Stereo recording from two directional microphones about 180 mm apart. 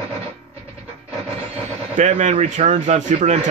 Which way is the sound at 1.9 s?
40° right (ahead or behind).